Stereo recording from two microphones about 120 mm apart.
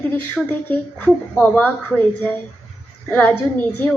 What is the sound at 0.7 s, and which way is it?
A woman's voice, 15° left (ahead or behind).